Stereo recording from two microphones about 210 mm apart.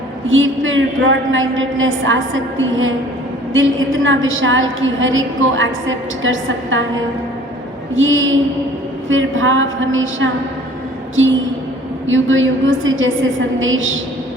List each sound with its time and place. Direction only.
0.3 s a woman's voice: 70° right (ahead or behind)
7.9 s a woman's voice: 70° right (ahead or behind)
11.1 s a sound: 70° right (ahead or behind)
12.0 s a woman's voice: 70° right (ahead or behind)